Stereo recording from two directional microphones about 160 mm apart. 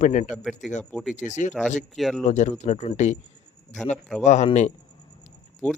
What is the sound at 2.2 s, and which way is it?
Speech, 45° left (ahead or behind).